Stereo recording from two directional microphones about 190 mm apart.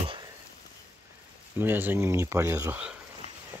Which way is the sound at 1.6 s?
10° right (ahead or behind).